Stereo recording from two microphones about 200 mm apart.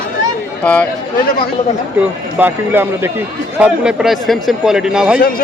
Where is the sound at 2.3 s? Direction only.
10° right (ahead or behind).